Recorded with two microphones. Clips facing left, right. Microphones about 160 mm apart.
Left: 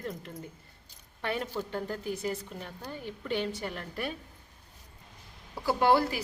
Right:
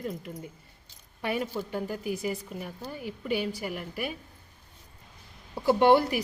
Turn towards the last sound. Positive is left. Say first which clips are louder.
# right 4 dB
turn(degrees=-20)  # may be behind; listen again after turning